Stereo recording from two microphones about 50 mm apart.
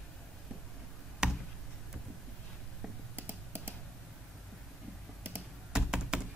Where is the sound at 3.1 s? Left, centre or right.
Right.